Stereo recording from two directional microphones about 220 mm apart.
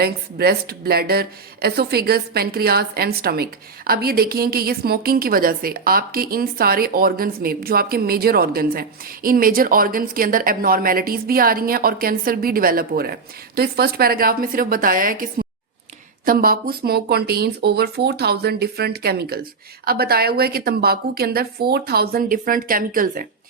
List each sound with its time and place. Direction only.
0.0 s speech: 45° right (ahead or behind)